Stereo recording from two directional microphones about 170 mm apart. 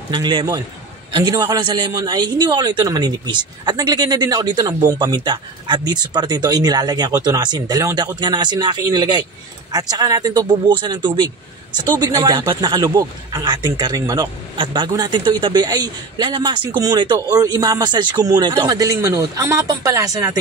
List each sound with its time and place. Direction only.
0.1 s speech: 25° right (ahead or behind)